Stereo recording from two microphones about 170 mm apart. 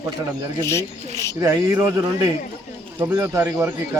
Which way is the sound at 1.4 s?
15° right (ahead or behind).